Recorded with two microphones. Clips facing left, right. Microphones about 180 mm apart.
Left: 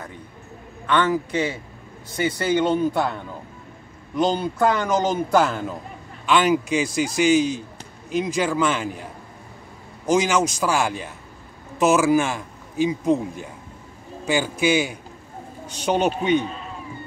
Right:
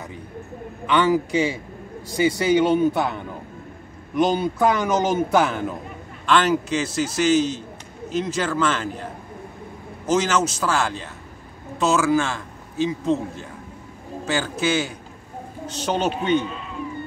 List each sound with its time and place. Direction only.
0.8 s speech: 10° right (ahead or behind)
4.4 s speech: centre (ahead or behind)
6.2 s speech: 10° left (ahead or behind)
10.0 s a man's voice: 10° left (ahead or behind)
16.4 s cat: 40° left (ahead or behind)